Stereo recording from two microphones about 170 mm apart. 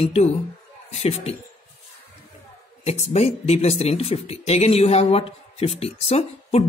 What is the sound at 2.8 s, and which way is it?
Speech, 40° left (ahead or behind).